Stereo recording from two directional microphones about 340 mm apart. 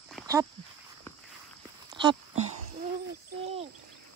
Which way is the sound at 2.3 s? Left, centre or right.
Right.